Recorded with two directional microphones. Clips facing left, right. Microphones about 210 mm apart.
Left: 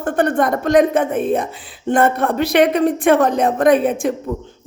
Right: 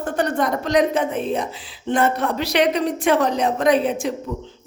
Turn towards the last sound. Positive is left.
turn(degrees=50)  # may be behind; listen again after turning